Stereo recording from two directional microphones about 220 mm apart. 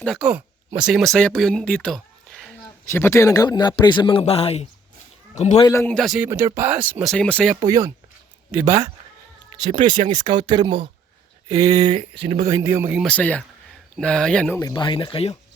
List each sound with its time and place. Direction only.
0.0 s a man's voice: centre (ahead or behind); by 5.6 s 30° left (ahead or behind)
5.6 s speech: 10° left (ahead or behind)
7.5 s speech: 15° right (ahead or behind)
9.5 s music: 20° right (ahead or behind)
9.7 s speech: 35° right (ahead or behind)
10.4 s speech: 20° right (ahead or behind)
12.5 s speech: 10° right (ahead or behind); by 14.6 s 5° left (ahead or behind)
14.6 s a man's voice: 20° left (ahead or behind)